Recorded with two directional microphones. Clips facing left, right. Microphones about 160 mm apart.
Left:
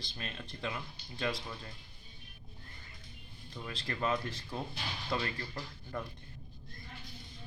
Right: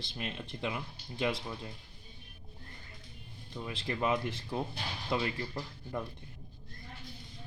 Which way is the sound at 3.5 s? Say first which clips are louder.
Right 4 dB; 20° right (ahead or behind).